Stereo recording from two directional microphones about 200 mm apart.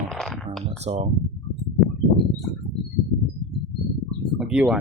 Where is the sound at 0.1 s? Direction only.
Centre (ahead or behind).